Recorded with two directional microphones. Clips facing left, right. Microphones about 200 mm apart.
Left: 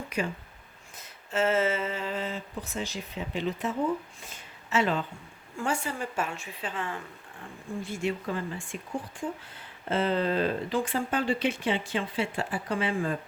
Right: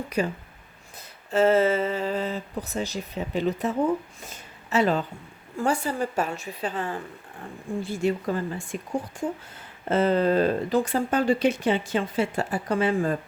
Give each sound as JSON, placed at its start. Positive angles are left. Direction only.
{"t": 0.2, "sound": "speech", "side_deg": -35}
{"t": 4.3, "sound": "a sound", "side_deg": -40}
{"t": 5.5, "sound": "speech", "side_deg": -35}